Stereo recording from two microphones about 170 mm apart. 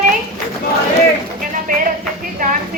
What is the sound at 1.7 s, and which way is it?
Speech, 55° right (ahead or behind).